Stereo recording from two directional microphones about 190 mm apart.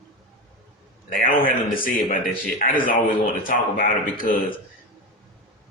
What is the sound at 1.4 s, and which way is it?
A man's voice, 50° left (ahead or behind).